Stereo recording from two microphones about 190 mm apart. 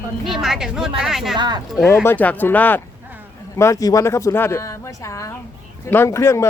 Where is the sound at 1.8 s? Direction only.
15° left (ahead or behind).